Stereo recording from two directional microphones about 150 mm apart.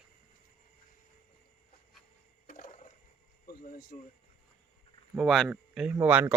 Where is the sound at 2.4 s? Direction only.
60° left (ahead or behind).